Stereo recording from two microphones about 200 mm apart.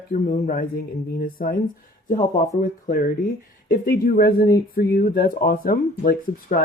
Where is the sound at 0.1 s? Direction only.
40° left (ahead or behind).